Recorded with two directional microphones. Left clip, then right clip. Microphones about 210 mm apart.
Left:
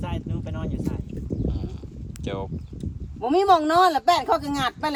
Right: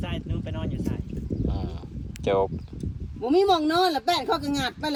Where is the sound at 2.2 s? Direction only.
Centre (ahead or behind).